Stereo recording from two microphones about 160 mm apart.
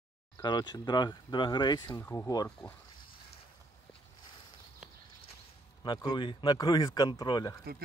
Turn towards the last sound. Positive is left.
turn(degrees=25)  # may be behind; listen again after turning